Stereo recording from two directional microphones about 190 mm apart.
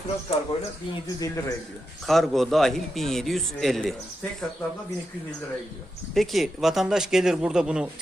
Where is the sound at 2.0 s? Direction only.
Centre (ahead or behind).